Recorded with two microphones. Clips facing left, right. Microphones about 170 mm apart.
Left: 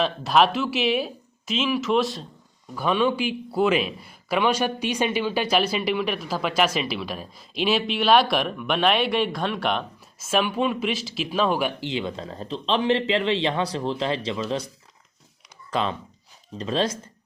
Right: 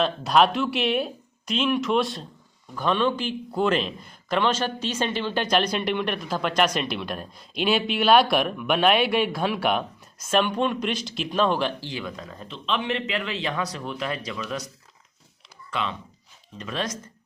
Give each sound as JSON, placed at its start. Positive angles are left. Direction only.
{"t": 0.0, "sound": "a man's voice", "side_deg": 0}
{"t": 11.9, "sound": "speech", "side_deg": 25}
{"t": 15.7, "sound": "speech", "side_deg": 35}